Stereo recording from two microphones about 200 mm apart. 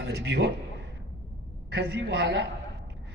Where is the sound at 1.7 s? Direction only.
55° right (ahead or behind).